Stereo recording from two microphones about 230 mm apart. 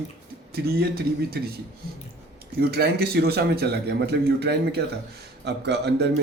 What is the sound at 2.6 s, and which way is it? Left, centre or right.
A man's voice, right.